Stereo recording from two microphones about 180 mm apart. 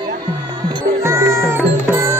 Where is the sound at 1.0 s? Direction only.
15° right (ahead or behind).